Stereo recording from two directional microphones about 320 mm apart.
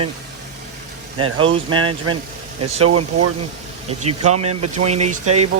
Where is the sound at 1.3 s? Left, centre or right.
Centre.